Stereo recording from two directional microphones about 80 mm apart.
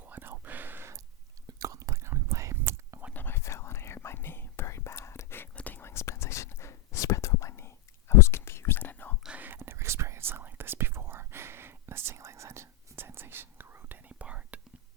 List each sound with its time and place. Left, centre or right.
0.0 s whispering: right
1.5 s whispering: right
3.1 s whispering: left
9.2 s whispering: centre